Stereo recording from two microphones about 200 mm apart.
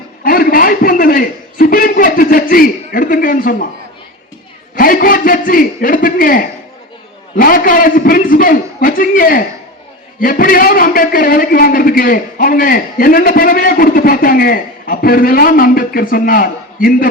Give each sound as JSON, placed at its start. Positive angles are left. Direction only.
{"t": 0.3, "sound": "a man's voice", "side_deg": 45}
{"t": 4.7, "sound": "a man's voice", "side_deg": 45}